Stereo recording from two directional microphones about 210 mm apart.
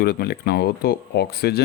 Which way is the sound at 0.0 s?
50° left (ahead or behind).